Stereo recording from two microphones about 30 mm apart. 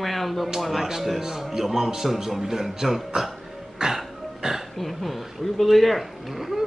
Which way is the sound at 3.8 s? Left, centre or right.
Right.